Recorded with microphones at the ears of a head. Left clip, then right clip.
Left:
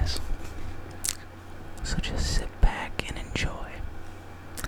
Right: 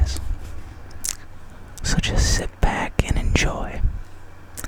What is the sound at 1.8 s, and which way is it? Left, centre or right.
Whispering, right.